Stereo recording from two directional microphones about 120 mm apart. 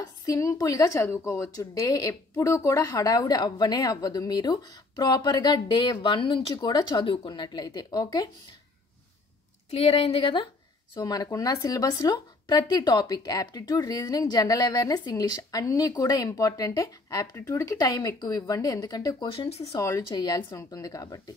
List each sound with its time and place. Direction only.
0.0 s a woman's voice: 30° left (ahead or behind)
9.7 s speech: 55° left (ahead or behind)
11.0 s a woman's voice: 35° left (ahead or behind)
19.3 s speech: 50° left (ahead or behind)
19.7 s speech: 25° left (ahead or behind)
20.1 s a woman's voice: 35° left (ahead or behind)